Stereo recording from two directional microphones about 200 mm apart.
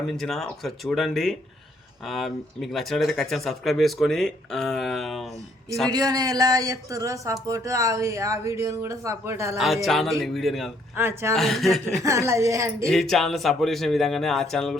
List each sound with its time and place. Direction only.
0.1 s speech: centre (ahead or behind)
5.9 s speech: 20° right (ahead or behind)
9.6 s speech: centre (ahead or behind)
10.9 s speech: 10° right (ahead or behind)
11.3 s speech: centre (ahead or behind)
12.0 s speech: 15° right (ahead or behind)
12.9 s speech: centre (ahead or behind)